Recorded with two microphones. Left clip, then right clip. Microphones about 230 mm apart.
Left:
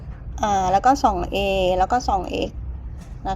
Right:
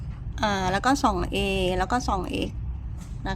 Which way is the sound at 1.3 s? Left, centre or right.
Right.